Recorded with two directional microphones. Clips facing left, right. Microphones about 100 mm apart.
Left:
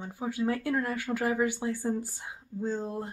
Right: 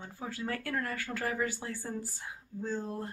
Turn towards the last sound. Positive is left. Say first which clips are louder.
# left 4 dB
turn(degrees=20)  # may be behind; listen again after turning